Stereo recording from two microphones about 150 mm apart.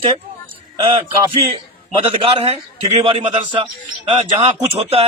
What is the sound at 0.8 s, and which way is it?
Speech, 35° right (ahead or behind).